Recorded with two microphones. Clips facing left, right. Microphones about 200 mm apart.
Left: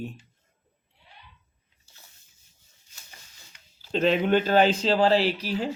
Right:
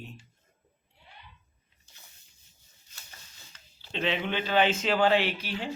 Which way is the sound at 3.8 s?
45° left (ahead or behind).